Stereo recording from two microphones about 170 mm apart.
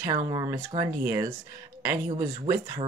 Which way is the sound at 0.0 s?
20° right (ahead or behind).